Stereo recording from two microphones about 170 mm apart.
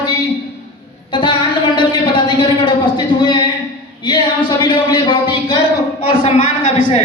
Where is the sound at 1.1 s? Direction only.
30° left (ahead or behind).